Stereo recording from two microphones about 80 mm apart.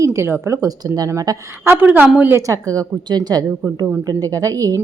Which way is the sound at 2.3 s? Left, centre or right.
Right.